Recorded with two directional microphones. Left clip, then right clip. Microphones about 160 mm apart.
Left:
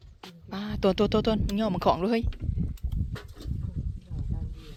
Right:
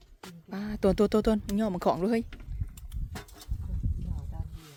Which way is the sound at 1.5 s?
10° right (ahead or behind).